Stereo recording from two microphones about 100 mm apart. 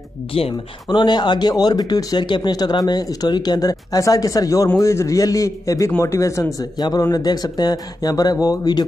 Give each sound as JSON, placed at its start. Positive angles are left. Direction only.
{"t": 0.3, "sound": "speech", "side_deg": 70}
{"t": 0.8, "sound": "speech", "side_deg": 45}